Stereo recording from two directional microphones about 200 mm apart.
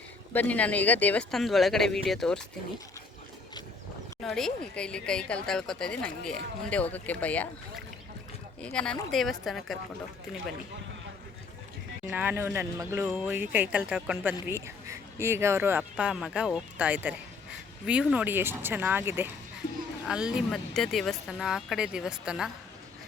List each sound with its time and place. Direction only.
0.3 s speech: 5° left (ahead or behind)
4.2 s speech: centre (ahead or behind)
8.6 s speech: 5° left (ahead or behind)
12.1 s speech: 10° right (ahead or behind)
19.6 s a sound: 45° left (ahead or behind)
20.1 s speech: 5° right (ahead or behind)